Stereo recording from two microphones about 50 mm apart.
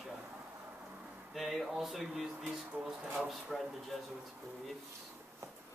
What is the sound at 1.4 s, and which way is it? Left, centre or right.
Speech, centre.